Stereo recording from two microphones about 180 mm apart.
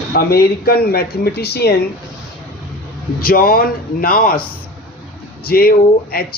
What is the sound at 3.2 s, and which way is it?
Speech, 55° left (ahead or behind).